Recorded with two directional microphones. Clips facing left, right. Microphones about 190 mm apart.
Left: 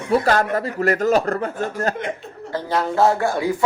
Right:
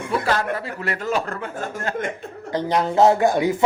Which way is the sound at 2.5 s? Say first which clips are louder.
Right 1 dB; 20° right (ahead or behind).